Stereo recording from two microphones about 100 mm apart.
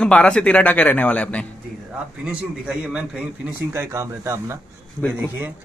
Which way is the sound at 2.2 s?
10° right (ahead or behind).